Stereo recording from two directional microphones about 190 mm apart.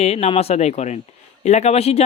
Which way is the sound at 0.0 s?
35° left (ahead or behind).